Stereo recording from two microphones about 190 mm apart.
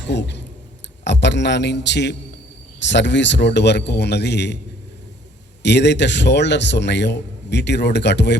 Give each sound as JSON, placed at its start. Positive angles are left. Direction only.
{"t": 0.0, "sound": "a man's voice", "side_deg": 65}
{"t": 5.6, "sound": "a man's voice", "side_deg": 65}